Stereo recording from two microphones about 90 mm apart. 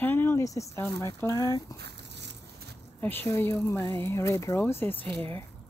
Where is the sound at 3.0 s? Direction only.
20° left (ahead or behind).